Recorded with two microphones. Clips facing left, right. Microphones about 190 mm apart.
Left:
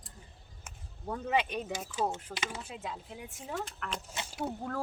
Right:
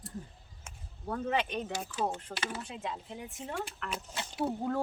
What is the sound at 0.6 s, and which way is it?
Speech, 10° left (ahead or behind).